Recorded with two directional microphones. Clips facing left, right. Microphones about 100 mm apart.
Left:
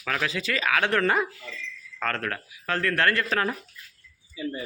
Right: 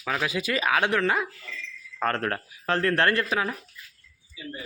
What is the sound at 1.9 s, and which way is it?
Speech, 25° right (ahead or behind).